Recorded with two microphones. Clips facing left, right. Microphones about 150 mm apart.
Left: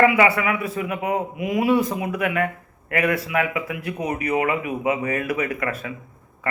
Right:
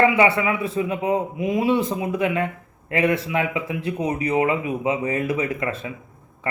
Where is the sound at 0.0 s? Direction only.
25° right (ahead or behind).